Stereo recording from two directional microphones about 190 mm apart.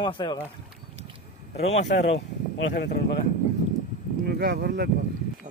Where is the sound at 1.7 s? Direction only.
65° left (ahead or behind).